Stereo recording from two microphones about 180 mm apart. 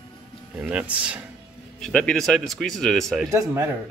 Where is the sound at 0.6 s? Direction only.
5° right (ahead or behind).